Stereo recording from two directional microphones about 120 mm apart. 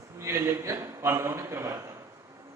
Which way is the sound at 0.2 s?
25° right (ahead or behind).